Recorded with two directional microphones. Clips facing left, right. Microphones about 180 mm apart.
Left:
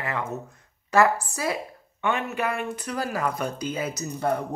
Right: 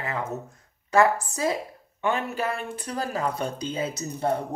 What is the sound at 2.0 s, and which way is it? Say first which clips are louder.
A woman's voice: even; 35° right (ahead or behind).